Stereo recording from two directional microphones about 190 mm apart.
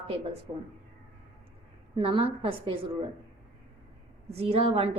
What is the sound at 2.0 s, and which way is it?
Speech, 30° right (ahead or behind).